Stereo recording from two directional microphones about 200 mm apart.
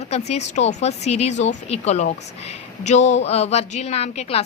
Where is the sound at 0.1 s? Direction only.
35° left (ahead or behind).